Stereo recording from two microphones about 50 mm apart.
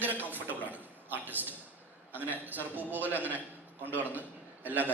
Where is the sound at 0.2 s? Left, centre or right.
Right.